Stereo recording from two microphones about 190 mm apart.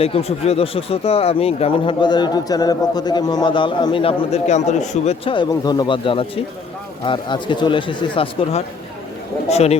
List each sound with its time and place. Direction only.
0.0 s a man's voice: 30° left (ahead or behind)